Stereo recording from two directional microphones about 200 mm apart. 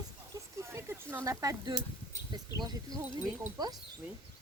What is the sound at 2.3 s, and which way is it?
Speech, 20° right (ahead or behind).